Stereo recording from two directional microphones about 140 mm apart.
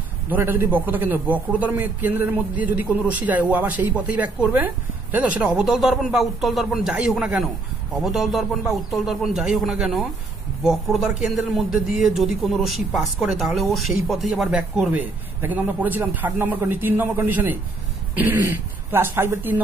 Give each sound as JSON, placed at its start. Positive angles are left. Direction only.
{"t": 0.3, "sound": "a man's voice", "side_deg": -15}